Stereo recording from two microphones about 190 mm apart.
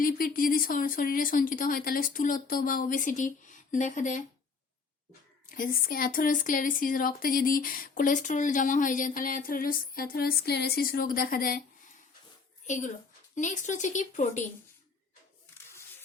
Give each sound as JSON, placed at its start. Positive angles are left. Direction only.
{"t": 0.0, "sound": "speech", "side_deg": 50}
{"t": 5.5, "sound": "speech", "side_deg": 50}
{"t": 12.6, "sound": "a woman's voice", "side_deg": 40}